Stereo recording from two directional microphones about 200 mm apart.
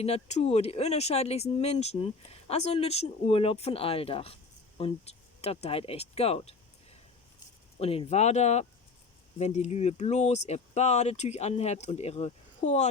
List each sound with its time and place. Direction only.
0.0 s speech: 30° left (ahead or behind)
7.8 s speech: 30° left (ahead or behind)